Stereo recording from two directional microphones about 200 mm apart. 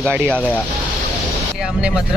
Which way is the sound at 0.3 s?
5° left (ahead or behind).